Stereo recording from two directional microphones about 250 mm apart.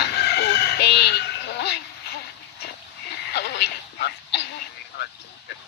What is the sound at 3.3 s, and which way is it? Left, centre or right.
Radio, left.